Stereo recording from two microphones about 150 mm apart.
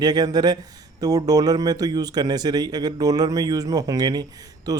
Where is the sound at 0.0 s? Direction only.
25° right (ahead or behind).